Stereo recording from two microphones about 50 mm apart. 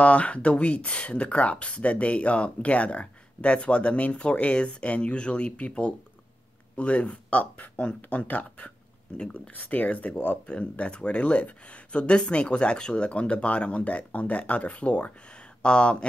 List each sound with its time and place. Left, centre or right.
0.0 s speech: left
9.5 s speech: left